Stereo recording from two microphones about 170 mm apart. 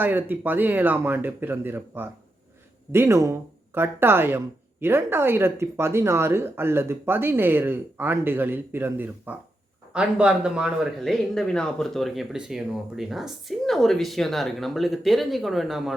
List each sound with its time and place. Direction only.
0.0 s speech: 10° right (ahead or behind)